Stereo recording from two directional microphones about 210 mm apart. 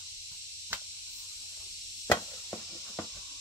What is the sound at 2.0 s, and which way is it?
Chop, 10° left (ahead or behind).